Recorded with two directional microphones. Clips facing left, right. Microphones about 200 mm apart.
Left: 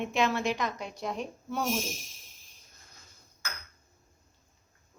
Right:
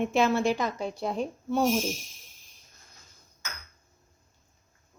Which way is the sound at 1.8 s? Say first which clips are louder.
Right 7 dB; centre (ahead or behind).